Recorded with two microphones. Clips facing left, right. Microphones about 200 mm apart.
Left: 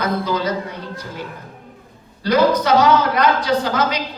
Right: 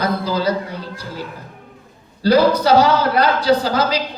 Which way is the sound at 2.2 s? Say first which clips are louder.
Right 2 dB; 30° right (ahead or behind).